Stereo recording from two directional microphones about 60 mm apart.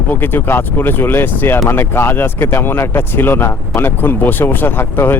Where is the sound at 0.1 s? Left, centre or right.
Left.